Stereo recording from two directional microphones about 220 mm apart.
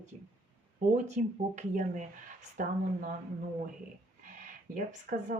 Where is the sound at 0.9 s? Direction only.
30° right (ahead or behind).